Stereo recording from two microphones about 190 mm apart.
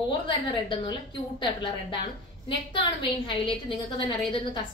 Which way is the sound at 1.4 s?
25° left (ahead or behind).